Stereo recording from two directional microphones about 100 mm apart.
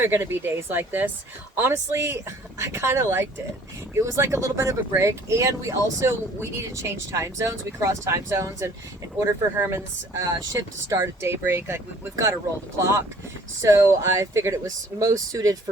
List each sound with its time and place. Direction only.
0.0 s speech: 25° right (ahead or behind)